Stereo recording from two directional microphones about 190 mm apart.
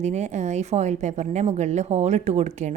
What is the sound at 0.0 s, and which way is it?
A woman's voice, 35° right (ahead or behind).